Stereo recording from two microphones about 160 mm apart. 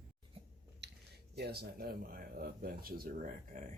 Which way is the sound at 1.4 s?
85° right.